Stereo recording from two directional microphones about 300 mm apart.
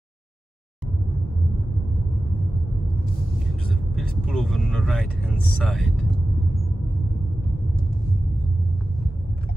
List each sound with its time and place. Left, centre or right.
4.0 s speech: centre